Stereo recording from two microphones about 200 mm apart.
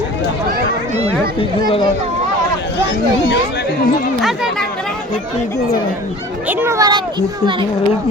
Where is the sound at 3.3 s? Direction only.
55° left (ahead or behind).